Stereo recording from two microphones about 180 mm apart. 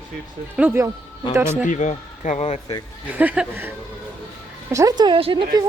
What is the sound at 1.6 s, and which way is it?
Speech, 40° left (ahead or behind).